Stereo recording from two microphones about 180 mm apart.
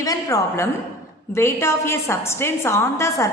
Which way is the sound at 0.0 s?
20° left (ahead or behind).